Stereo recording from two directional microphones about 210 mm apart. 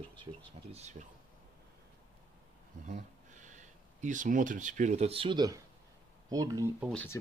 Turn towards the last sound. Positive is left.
turn(degrees=5)  # may be behind; listen again after turning